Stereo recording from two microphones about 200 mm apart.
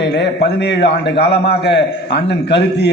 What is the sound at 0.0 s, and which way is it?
A man's voice, 55° left (ahead or behind).